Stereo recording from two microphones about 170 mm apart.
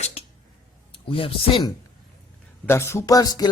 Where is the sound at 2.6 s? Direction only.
15° left (ahead or behind).